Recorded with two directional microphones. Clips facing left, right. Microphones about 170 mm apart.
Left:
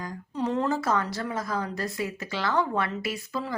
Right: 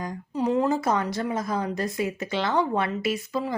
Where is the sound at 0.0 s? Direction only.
10° right (ahead or behind).